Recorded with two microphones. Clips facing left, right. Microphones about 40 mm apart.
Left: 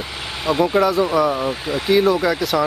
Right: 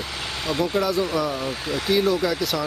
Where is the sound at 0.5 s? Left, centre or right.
Left.